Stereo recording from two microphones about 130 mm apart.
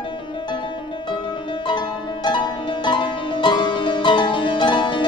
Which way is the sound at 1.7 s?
35° left (ahead or behind).